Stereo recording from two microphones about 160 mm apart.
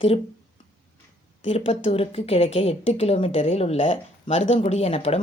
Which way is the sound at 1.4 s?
35° left (ahead or behind).